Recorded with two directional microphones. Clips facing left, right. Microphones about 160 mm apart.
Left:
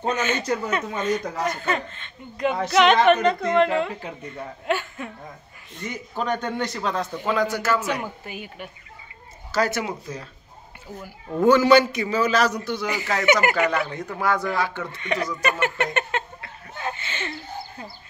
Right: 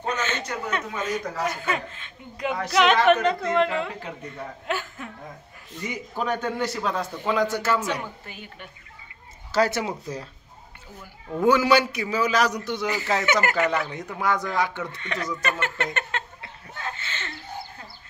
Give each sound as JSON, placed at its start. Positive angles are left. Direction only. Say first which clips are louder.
{"t": 0.1, "sound": "a woman's voice", "louder": "left 3 dB", "side_deg": 10}
{"t": 0.7, "sound": "a woman's voice", "louder": "left 4 dB", "side_deg": 0}
{"t": 7.3, "sound": "a man's voice", "louder": "even", "side_deg": -25}
{"t": 7.8, "sound": "a woman's voice", "louder": "left 2 dB", "side_deg": 10}
{"t": 9.5, "sound": "speech", "louder": "right 1 dB", "side_deg": -30}
{"t": 11.4, "sound": "a man's voice", "louder": "left 4 dB", "side_deg": -10}
{"t": 12.8, "sound": "a woman's voice", "louder": "left 3 dB", "side_deg": 15}
{"t": 13.8, "sound": "a man's voice", "louder": "left 2 dB", "side_deg": -15}
{"t": 15.0, "sound": "a woman's voice", "louder": "left 8 dB", "side_deg": 15}
{"t": 16.7, "sound": "a sound", "louder": "left 4 dB", "side_deg": 15}